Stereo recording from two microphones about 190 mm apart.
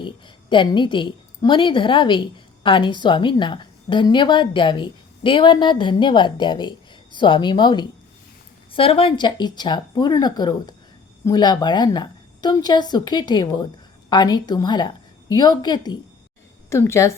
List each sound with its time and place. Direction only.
0.5 s a woman's voice: 25° left (ahead or behind)